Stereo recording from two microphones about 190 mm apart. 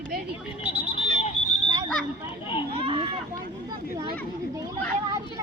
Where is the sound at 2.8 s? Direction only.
30° right (ahead or behind).